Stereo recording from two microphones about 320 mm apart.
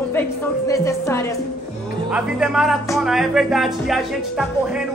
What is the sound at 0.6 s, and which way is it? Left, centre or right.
Speech, centre.